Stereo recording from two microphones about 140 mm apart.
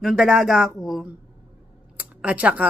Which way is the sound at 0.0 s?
5° right (ahead or behind).